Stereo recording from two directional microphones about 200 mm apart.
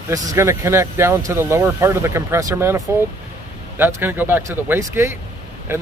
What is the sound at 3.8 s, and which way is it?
Speech, 10° right (ahead or behind).